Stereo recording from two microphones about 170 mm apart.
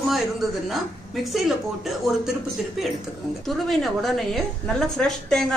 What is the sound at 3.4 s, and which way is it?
A woman's voice, centre (ahead or behind).